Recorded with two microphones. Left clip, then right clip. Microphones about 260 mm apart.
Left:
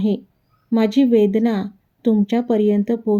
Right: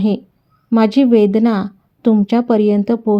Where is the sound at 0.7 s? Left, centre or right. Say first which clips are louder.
Right 4 dB; centre.